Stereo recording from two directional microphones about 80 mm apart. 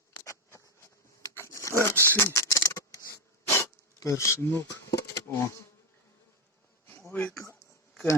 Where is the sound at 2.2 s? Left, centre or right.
Left.